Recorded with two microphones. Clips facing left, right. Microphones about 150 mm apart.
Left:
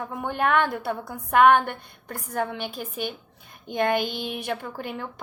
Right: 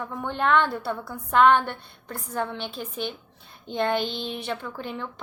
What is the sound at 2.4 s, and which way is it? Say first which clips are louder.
A woman's voice: left 1 dB; 10° left (ahead or behind).